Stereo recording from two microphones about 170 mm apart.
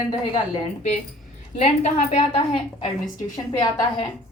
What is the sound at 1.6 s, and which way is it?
Speech, 40° left (ahead or behind).